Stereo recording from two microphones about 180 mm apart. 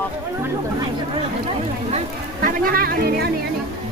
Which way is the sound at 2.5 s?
55° right (ahead or behind).